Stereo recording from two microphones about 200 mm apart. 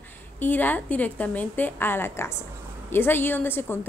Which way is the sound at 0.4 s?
10° left (ahead or behind).